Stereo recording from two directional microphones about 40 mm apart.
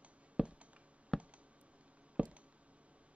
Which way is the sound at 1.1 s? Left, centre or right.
Centre.